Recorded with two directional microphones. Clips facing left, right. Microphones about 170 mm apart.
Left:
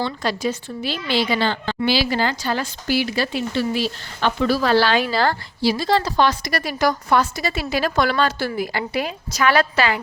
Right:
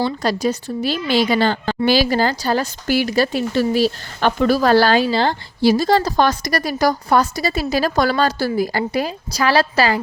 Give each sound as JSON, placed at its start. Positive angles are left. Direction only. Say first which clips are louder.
{"t": 0.0, "sound": "a woman's voice", "louder": "right 4 dB", "side_deg": -40}
{"t": 5.0, "sound": "a woman's voice", "louder": "right 2 dB", "side_deg": -25}
{"t": 5.6, "sound": "a woman's voice", "louder": "right 4 dB", "side_deg": -45}